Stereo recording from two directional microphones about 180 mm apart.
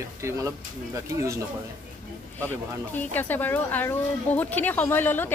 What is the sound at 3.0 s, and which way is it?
Speech, 10° left (ahead or behind).